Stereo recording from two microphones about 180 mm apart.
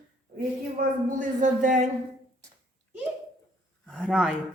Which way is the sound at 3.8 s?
5° left (ahead or behind).